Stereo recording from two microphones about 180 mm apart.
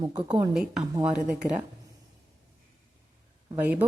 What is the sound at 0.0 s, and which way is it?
Speech, 25° right (ahead or behind).